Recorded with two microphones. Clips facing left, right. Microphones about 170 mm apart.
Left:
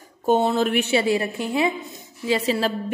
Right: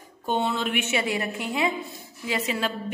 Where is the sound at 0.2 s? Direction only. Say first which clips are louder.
Left 7 dB; 40° left (ahead or behind).